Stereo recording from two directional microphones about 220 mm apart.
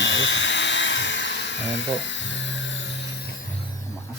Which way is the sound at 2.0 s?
55° left (ahead or behind).